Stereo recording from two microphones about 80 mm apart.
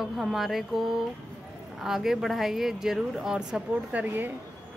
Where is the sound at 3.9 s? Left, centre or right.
Centre.